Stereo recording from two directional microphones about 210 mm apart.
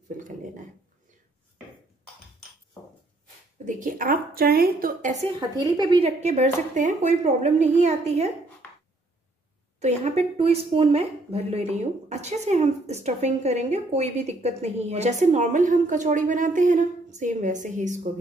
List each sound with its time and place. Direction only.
0.2 s speech: 40° right (ahead or behind)
3.6 s speech: 40° right (ahead or behind)
5.8 s speech: 20° right (ahead or behind)
9.8 s speech: 30° right (ahead or behind)